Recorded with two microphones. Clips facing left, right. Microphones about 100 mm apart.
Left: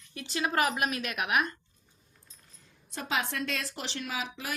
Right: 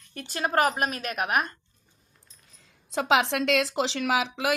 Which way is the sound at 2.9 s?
90° right.